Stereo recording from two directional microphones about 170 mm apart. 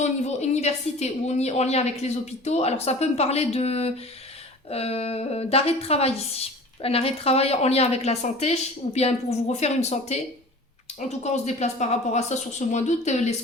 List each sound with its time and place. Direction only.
0.0 s a woman's voice: 40° left (ahead or behind)